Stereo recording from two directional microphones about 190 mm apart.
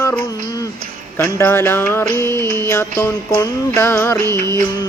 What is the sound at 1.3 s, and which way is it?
Music, 10° left (ahead or behind).